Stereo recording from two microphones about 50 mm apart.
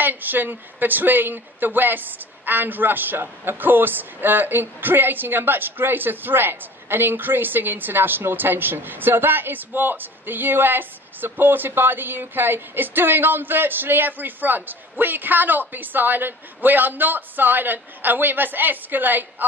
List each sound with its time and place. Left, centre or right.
0.0 s speech: right